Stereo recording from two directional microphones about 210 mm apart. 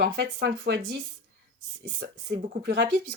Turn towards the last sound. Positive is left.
turn(degrees=-50)  # may be behind; listen again after turning